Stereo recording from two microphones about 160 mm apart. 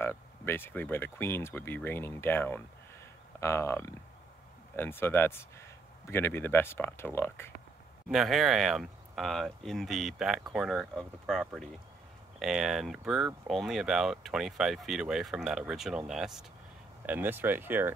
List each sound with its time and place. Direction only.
0.0 s speech: 15° left (ahead or behind)
8.1 s speech: centre (ahead or behind)